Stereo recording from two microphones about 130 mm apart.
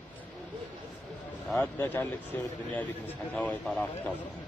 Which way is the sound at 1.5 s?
15° left (ahead or behind).